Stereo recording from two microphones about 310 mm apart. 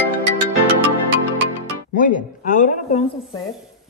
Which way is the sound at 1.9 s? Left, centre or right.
Left.